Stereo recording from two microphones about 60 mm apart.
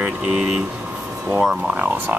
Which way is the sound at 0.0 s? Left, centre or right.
Centre.